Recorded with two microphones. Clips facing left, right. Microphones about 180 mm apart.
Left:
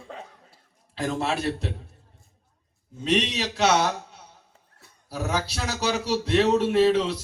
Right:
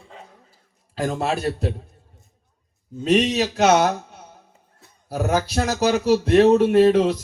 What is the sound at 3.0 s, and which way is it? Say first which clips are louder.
Speech: right 6 dB; 45° right (ahead or behind).